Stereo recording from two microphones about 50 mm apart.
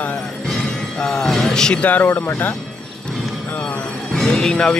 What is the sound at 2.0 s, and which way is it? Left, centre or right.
Speech, left.